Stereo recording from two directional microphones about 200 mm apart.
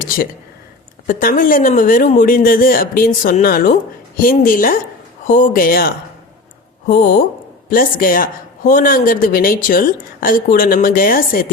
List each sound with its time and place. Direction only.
1.0 s speech: 45° left (ahead or behind)
7.7 s speech: 45° left (ahead or behind)